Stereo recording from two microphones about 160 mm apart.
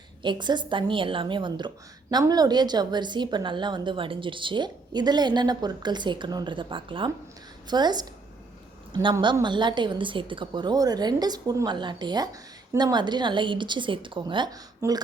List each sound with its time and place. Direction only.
0.2 s a woman's voice: 30° right (ahead or behind)